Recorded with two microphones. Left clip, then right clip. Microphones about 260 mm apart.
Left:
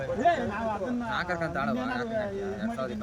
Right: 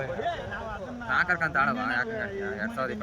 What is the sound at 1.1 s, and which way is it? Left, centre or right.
Speech, centre.